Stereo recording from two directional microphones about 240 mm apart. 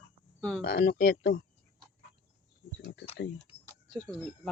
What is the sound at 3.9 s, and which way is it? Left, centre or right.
Speech, centre.